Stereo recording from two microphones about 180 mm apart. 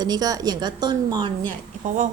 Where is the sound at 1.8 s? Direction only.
45° right (ahead or behind).